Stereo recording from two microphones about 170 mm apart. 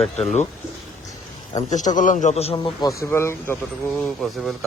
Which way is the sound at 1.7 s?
45° left (ahead or behind).